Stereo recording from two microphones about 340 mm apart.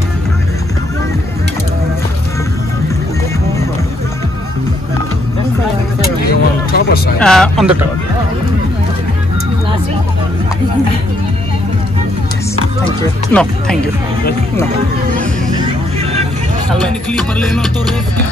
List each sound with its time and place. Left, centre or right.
6.2 s music: left
7.2 s speech: centre
13.3 s speech: centre
15.5 s vehicle: centre